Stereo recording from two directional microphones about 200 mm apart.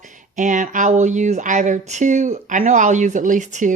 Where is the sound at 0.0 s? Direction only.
40° right (ahead or behind).